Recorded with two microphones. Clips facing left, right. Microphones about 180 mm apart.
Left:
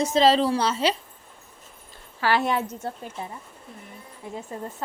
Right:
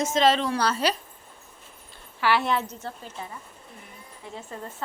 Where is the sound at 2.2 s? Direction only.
45° left (ahead or behind).